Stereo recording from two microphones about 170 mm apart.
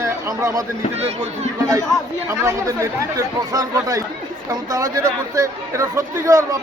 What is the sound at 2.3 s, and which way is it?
Speech, 20° right (ahead or behind).